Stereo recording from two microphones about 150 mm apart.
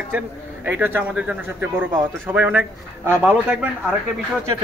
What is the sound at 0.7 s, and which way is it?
Speech, 10° right (ahead or behind).